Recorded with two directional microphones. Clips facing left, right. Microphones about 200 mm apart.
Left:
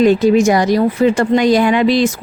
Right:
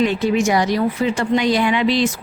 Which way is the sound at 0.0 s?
40° left (ahead or behind).